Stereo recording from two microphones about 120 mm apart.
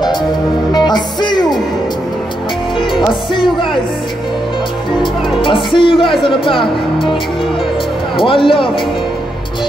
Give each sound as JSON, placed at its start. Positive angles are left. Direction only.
{"t": 0.7, "sound": "music", "side_deg": 35}
{"t": 3.1, "sound": "speech", "side_deg": 45}
{"t": 5.0, "sound": "speech", "side_deg": 45}
{"t": 8.2, "sound": "speech", "side_deg": 45}